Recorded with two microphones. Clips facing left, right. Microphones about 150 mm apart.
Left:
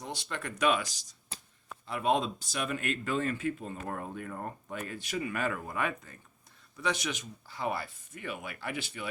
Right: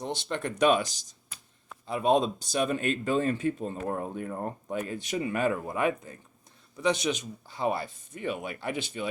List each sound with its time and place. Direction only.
0.0 s speech: 25° right (ahead or behind)
1.3 s a sound: 35° left (ahead or behind)
1.9 s speech: 20° right (ahead or behind)